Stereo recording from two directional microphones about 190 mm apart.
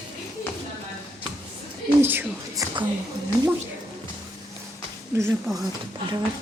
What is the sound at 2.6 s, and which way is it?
Speech, 20° right (ahead or behind).